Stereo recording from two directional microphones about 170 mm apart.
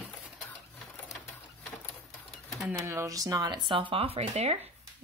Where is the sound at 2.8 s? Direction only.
15° right (ahead or behind).